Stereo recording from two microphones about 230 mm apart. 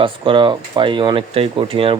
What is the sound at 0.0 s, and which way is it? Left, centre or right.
Speech, right.